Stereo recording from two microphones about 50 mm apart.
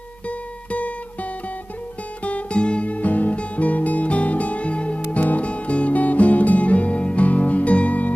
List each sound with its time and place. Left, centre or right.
0.7 s music: left
2.2 s guitar: left